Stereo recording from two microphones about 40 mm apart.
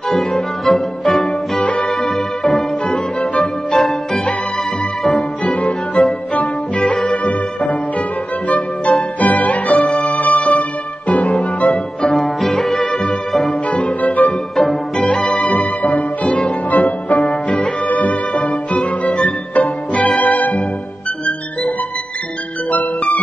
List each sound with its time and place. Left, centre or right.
0.1 s music: centre
5.4 s music: left
8.5 s music: left
11.7 s music: centre
13.7 s music: left
15.1 s music: left
15.6 s music: left
22.7 s music: left